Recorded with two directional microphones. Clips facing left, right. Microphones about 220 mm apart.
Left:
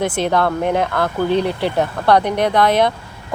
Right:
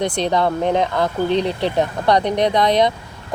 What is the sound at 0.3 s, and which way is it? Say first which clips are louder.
Speech: even; 15° right (ahead or behind).